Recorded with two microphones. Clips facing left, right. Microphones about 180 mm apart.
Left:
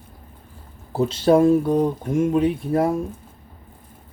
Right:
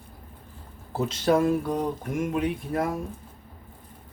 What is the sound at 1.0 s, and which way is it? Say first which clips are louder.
Speech: left 7 dB; 30° left (ahead or behind).